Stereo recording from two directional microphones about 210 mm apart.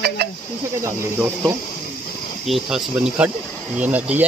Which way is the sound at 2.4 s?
Centre (ahead or behind).